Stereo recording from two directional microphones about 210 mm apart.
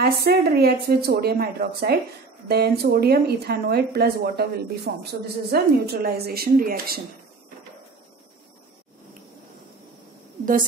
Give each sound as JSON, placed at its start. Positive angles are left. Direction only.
{"t": 0.0, "sound": "speech", "side_deg": -45}